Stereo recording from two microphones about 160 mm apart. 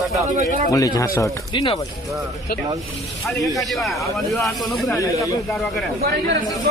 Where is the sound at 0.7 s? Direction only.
20° left (ahead or behind).